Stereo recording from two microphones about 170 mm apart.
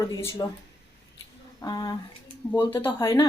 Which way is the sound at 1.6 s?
20° left (ahead or behind).